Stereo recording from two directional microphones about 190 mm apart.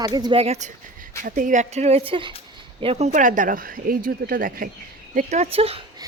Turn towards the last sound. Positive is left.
turn(degrees=-30)  # may be behind; listen again after turning